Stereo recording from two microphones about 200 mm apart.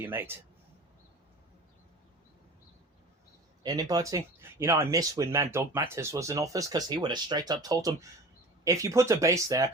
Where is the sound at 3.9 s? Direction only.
15° right (ahead or behind).